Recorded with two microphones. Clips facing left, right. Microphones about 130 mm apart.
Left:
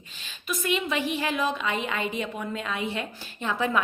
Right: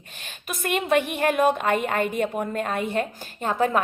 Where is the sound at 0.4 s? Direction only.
55° right (ahead or behind).